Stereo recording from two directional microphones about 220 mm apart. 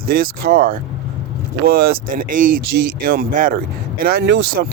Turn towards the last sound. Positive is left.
turn(degrees=-50)  # may be behind; listen again after turning